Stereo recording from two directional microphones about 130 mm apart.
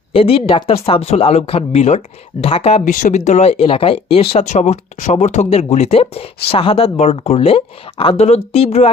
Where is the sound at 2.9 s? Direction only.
80° left; by 4.5 s 50° left (ahead or behind).